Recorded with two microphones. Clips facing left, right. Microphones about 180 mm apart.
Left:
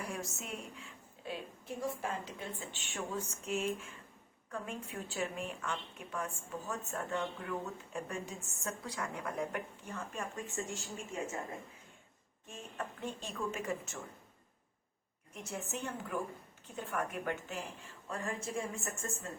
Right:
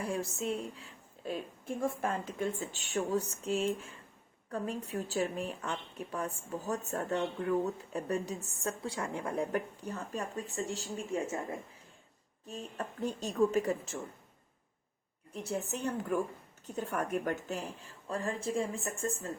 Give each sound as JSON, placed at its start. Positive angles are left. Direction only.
{"t": 0.0, "sound": "a woman's voice", "side_deg": -30}
{"t": 1.6, "sound": "a woman's voice", "side_deg": -50}
{"t": 12.5, "sound": "a woman's voice", "side_deg": -40}
{"t": 15.3, "sound": "a woman's voice", "side_deg": -35}